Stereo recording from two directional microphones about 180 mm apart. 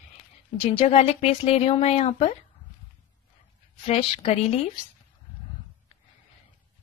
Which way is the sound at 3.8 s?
30° left (ahead or behind).